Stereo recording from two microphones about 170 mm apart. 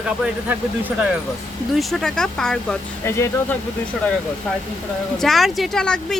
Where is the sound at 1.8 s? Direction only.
Centre (ahead or behind).